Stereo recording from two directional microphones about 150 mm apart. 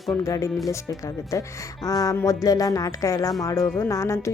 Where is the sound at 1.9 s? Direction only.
25° left (ahead or behind).